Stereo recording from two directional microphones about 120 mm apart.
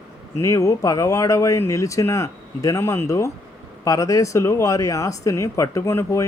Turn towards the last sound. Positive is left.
turn(degrees=25)  # may be behind; listen again after turning